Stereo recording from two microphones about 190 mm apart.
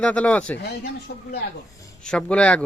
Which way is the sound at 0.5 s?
65° left (ahead or behind).